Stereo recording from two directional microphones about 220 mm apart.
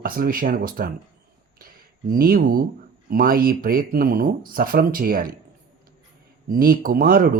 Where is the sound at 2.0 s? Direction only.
40° right (ahead or behind).